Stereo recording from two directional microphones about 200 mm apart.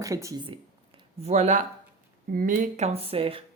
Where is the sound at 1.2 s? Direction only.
35° right (ahead or behind).